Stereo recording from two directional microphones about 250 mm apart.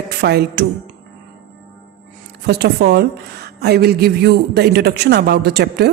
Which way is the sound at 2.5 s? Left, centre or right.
Right.